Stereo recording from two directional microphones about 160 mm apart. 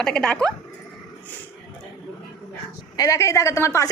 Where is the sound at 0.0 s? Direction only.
5° left (ahead or behind).